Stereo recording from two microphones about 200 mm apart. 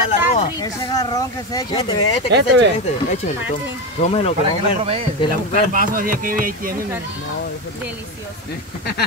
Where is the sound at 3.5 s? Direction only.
35° left (ahead or behind).